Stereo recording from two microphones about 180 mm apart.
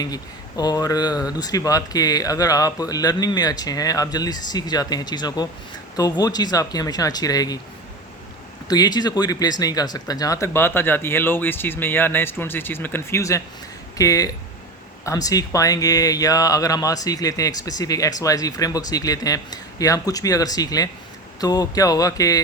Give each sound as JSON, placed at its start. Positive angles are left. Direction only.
{"t": 0.0, "sound": "speech", "side_deg": 20}
{"t": 8.6, "sound": "speech", "side_deg": 20}